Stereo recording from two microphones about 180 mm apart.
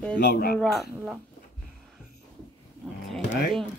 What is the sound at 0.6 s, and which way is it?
Speech, centre (ahead or behind).